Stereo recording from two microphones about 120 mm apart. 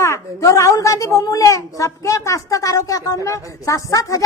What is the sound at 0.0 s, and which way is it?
A woman's voice, 25° left (ahead or behind).